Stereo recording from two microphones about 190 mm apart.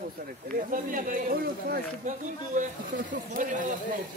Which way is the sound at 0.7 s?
45° right (ahead or behind).